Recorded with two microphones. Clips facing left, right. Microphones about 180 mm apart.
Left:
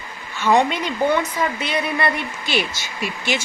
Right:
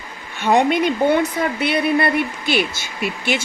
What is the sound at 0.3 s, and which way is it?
Speech, 60° right (ahead or behind).